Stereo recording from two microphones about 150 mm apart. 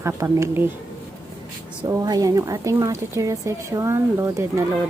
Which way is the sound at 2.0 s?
25° right (ahead or behind).